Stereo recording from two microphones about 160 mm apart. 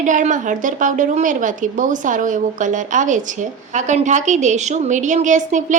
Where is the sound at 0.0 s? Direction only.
50° right (ahead or behind).